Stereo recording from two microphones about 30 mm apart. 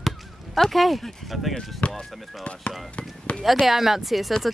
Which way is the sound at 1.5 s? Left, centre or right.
Left.